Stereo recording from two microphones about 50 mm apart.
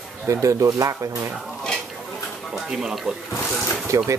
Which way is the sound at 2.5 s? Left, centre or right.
Centre.